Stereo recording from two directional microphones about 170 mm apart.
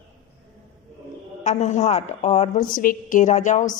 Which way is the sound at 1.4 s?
45° left (ahead or behind).